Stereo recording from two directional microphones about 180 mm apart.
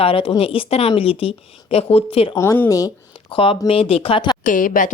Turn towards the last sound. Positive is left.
turn(degrees=50)  # may be behind; listen again after turning